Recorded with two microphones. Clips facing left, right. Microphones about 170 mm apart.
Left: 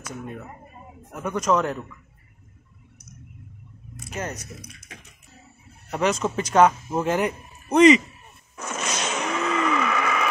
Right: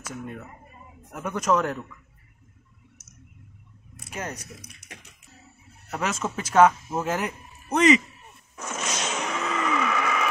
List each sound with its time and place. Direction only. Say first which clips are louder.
1.1 s speech: left 2 dB; 5° right (ahead or behind)
4.2 s speech: left 3 dB; 10° right (ahead or behind)
5.9 s speech: left 5 dB; 5° right (ahead or behind)
8.5 s a sound: left 2 dB; 60° left (ahead or behind)